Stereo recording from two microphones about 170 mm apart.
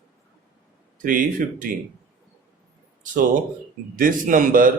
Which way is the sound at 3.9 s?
55° right (ahead or behind).